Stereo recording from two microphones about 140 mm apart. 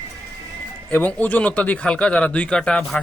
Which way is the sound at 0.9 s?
10° left (ahead or behind).